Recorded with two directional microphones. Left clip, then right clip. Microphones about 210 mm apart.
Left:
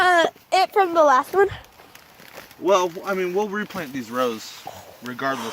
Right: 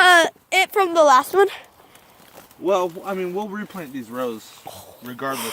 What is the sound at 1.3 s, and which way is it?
Speech, 30° right (ahead or behind).